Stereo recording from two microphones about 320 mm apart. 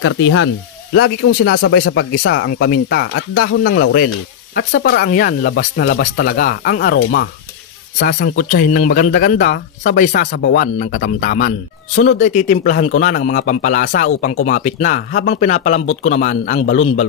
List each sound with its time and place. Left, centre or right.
0.0 s speech: left